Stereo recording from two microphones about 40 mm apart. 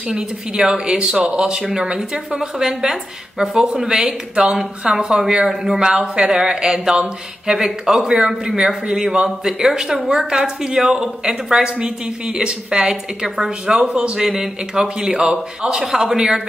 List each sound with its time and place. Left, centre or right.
0.1 s speech: centre
13.7 s speech: right; by 16.4 s centre